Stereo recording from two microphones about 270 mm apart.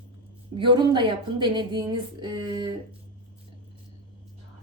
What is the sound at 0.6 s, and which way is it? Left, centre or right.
Speech, centre.